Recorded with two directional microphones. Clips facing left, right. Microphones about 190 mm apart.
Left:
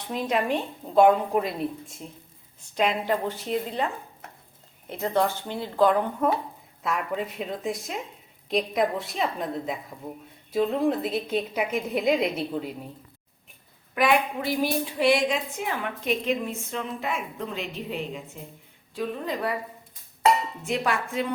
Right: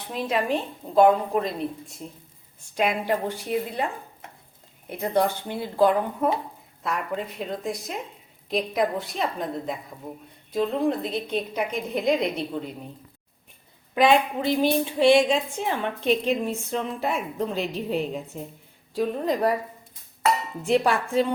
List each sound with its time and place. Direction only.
0.1 s a woman's voice: centre (ahead or behind)
2.7 s speech: 10° right (ahead or behind)
4.9 s a woman's voice: 15° right (ahead or behind); by 12.7 s 5° left (ahead or behind)
13.9 s a woman's voice: 25° right (ahead or behind); by 19.5 s 40° right (ahead or behind)
20.7 s a woman's voice: 30° right (ahead or behind)